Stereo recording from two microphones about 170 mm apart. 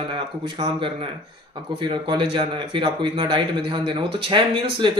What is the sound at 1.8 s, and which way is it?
Speech, 30° right (ahead or behind).